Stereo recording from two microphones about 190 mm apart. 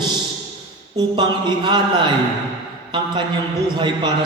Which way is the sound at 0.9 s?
25° right (ahead or behind).